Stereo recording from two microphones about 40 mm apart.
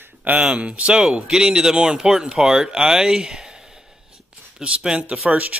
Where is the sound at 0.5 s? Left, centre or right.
Right.